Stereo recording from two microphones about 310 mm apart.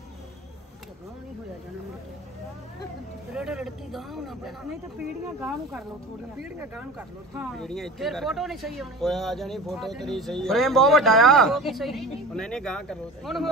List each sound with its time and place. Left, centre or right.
3.3 s speech: centre